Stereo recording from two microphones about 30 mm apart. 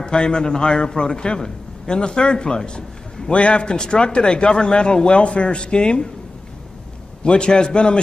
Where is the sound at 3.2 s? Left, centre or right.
Left.